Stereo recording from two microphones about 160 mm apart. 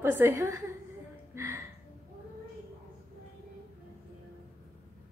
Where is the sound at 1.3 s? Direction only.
15° right (ahead or behind).